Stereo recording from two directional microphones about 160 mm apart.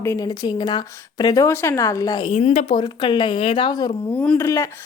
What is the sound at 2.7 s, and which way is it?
A woman's voice, 30° left (ahead or behind).